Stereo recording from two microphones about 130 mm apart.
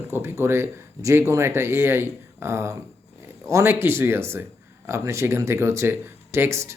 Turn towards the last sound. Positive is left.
turn(degrees=-20)  # may be behind; listen again after turning